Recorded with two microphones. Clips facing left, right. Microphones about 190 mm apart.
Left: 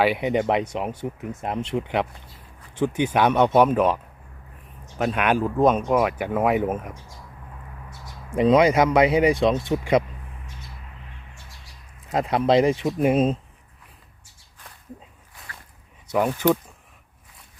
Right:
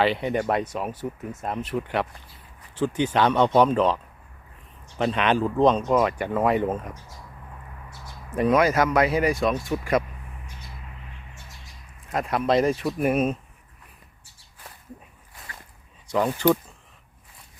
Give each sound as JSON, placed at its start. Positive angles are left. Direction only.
{"t": 0.0, "sound": "speech", "side_deg": 15}
{"t": 12.1, "sound": "speech", "side_deg": 25}
{"t": 16.1, "sound": "speech", "side_deg": 10}